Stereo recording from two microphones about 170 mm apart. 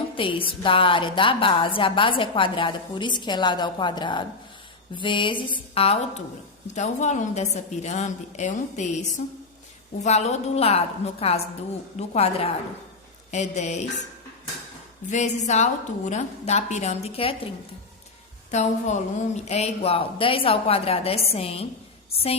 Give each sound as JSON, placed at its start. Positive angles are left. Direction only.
{"t": 0.2, "sound": "a woman's voice", "side_deg": 30}
{"t": 15.1, "sound": "a woman's voice", "side_deg": 45}
{"t": 18.5, "sound": "a woman's voice", "side_deg": 45}